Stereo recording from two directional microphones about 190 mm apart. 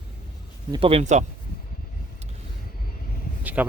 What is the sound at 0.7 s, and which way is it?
Speech, 30° right (ahead or behind).